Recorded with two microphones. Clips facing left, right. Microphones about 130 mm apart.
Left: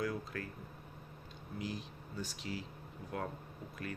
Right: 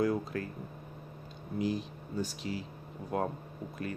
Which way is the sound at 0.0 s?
35° right (ahead or behind).